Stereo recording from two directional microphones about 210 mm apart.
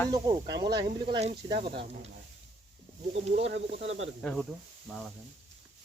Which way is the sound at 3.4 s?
60° right (ahead or behind).